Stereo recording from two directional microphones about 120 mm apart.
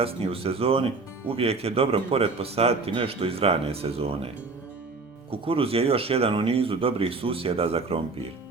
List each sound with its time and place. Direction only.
0.0 s a man's voice: 55° right (ahead or behind)
5.3 s speech: 50° right (ahead or behind)